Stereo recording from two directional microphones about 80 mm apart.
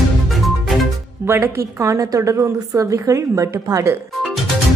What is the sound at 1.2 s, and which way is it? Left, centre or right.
A woman's voice, right.